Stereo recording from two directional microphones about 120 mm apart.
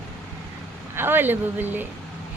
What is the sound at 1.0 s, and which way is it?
Speech, 15° right (ahead or behind).